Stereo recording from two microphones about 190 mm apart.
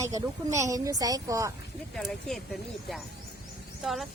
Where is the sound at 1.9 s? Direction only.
Centre (ahead or behind).